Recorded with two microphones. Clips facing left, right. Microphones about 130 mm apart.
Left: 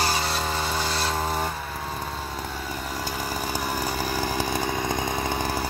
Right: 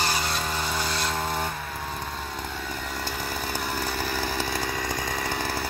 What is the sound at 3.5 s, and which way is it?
Chainsaw, 10° left (ahead or behind).